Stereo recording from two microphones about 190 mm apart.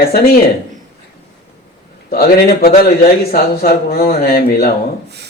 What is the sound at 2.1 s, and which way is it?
Speech, 50° left (ahead or behind).